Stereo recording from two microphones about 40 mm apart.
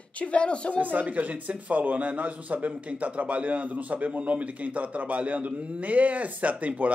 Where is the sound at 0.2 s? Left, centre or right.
Left.